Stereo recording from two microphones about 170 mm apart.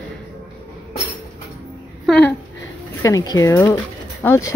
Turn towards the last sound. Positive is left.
turn(degrees=15)  # may be behind; listen again after turning